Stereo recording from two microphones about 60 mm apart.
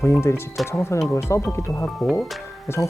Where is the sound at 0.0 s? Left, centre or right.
Left.